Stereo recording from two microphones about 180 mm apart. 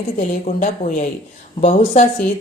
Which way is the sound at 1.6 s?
35° left (ahead or behind).